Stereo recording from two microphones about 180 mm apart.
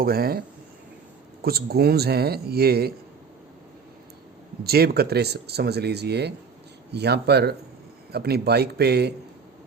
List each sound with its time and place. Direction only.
0.0 s speech: 55° right (ahead or behind)
4.6 s speech: 60° right (ahead or behind)